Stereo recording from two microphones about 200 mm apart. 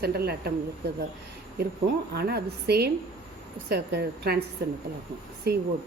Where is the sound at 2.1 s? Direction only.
50° right (ahead or behind).